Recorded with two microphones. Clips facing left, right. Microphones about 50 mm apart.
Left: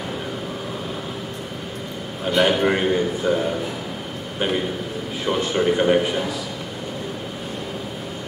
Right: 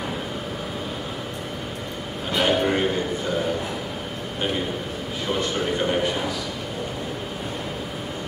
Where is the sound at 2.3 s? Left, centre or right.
Centre.